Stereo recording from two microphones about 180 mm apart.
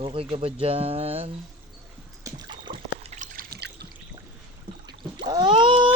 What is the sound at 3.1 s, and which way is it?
Trickle, 45° right (ahead or behind).